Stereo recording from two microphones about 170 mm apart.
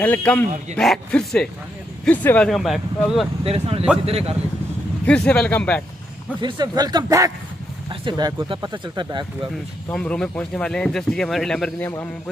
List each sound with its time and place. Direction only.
0.0 s speech: 10° left (ahead or behind)
3.4 s speech: 35° right (ahead or behind)
5.0 s speech: 5° left (ahead or behind)
6.4 s speech: 25° right (ahead or behind)
9.9 s speech: 5° left (ahead or behind)